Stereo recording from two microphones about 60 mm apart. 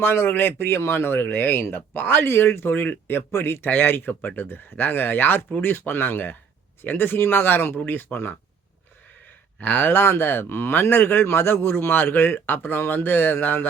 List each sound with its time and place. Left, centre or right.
0.0 s speech: left
9.6 s speech: left